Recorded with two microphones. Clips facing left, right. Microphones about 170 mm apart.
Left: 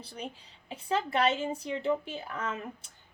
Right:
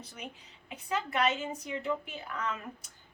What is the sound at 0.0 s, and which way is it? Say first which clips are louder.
A woman's voice: left 4 dB; 30° left (ahead or behind).